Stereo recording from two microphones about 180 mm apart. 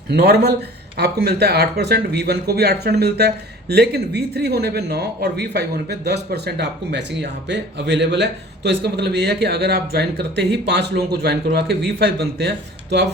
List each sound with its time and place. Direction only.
0.1 s speech: 65° right (ahead or behind)